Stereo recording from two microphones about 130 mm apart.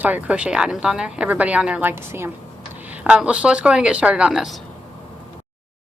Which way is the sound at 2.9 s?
10° right (ahead or behind).